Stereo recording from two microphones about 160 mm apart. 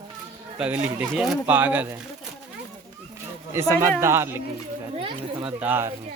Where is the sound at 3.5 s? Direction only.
15° right (ahead or behind).